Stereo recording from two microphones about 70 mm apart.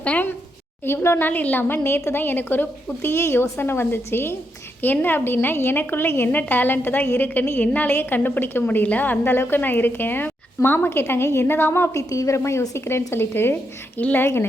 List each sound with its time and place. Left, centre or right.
0.0 s a woman's voice: centre
0.9 s a woman's voice: left
1.3 s a woman's voice: left
11.9 s a woman's voice: left